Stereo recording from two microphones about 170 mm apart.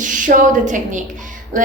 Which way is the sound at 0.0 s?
50° right (ahead or behind).